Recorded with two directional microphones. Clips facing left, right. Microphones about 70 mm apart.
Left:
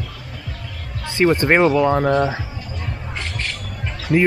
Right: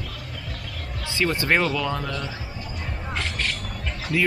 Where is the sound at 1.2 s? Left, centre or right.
Left.